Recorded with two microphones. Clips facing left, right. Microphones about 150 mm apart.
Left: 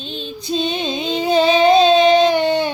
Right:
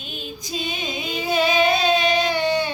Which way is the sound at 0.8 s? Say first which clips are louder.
Left 7 dB; 30° left (ahead or behind).